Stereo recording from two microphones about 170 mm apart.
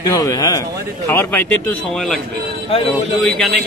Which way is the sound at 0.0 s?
20° left (ahead or behind).